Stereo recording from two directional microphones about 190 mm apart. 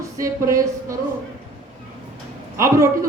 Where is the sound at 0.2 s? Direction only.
15° right (ahead or behind).